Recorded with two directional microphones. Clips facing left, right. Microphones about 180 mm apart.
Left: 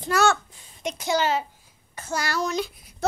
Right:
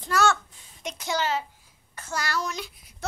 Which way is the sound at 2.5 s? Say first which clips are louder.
Left 8 dB; 35° left (ahead or behind).